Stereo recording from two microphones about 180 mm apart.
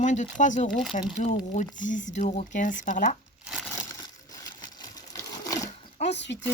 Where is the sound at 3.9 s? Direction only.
20° left (ahead or behind).